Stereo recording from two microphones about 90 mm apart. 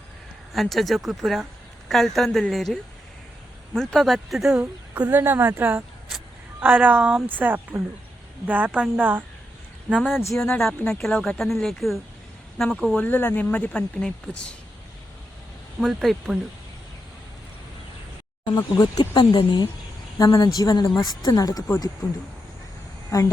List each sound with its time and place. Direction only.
0.5 s speech: centre (ahead or behind)
3.8 s speech: centre (ahead or behind)
5.1 s a woman's voice: 25° right (ahead or behind)
10.0 s speech: 5° right (ahead or behind)
13.0 s speech: 20° left (ahead or behind)
15.8 s speech: centre (ahead or behind)
18.4 s speech: 55° left (ahead or behind)
19.2 s speech: 80° left
20.1 s speech: 45° left (ahead or behind)
23.1 s a woman's voice: 40° left (ahead or behind)